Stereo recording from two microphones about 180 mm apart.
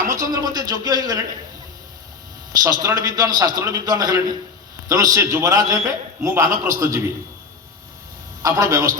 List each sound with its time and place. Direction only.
0.1 s a man's voice: 20° right (ahead or behind)
2.6 s a man's voice: 20° right (ahead or behind)
8.4 s a man's voice: 20° right (ahead or behind)